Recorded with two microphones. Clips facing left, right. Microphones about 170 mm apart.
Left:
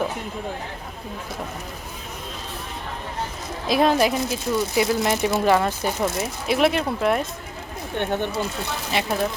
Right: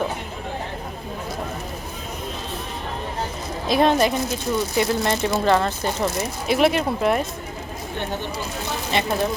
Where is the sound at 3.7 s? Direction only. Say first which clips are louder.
Right 1 dB; centre (ahead or behind).